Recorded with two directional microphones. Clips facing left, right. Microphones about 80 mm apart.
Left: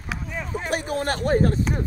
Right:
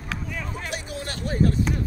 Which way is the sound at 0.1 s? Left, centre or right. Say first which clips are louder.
Left 3 dB; centre.